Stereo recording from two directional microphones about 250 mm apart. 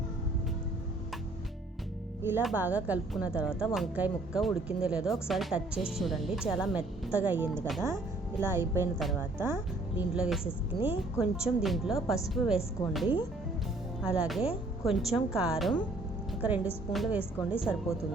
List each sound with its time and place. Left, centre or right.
2.3 s speech: centre